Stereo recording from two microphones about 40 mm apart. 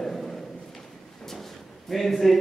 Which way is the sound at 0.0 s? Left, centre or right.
Centre.